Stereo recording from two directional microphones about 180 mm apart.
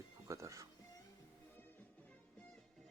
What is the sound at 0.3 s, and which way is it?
Music, 15° right (ahead or behind).